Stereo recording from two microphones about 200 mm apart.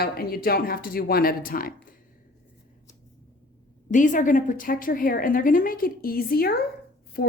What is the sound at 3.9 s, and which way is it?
A woman's voice, 40° left (ahead or behind).